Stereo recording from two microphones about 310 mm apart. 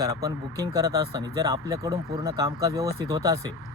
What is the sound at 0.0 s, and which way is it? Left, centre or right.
Speech, centre.